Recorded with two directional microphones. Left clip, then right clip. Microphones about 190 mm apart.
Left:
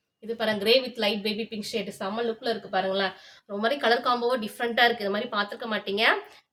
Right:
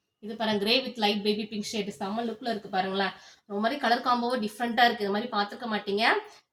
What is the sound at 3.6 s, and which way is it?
A woman's voice, 25° left (ahead or behind).